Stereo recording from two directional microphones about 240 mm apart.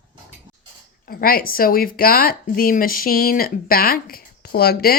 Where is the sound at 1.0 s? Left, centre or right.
Left.